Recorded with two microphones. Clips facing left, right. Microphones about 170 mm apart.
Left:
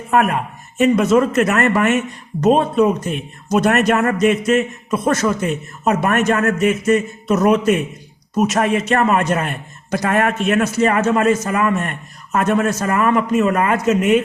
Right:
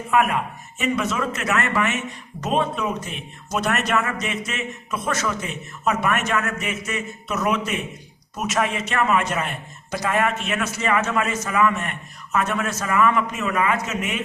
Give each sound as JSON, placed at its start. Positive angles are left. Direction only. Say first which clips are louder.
{"t": 0.1, "sound": "a man's voice", "louder": "left 4 dB", "side_deg": 45}